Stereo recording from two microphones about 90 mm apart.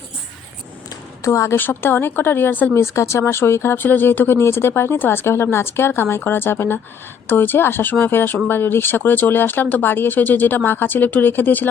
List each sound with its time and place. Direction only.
1.2 s speech: 35° left (ahead or behind)
1.5 s speech: 25° left (ahead or behind)
2.7 s speech: 30° left (ahead or behind)